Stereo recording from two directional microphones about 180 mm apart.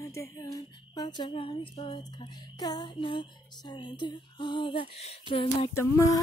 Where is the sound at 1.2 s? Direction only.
30° left (ahead or behind).